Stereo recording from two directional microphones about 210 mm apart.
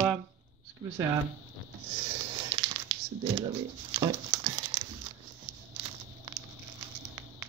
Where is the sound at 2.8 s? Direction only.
25° right (ahead or behind).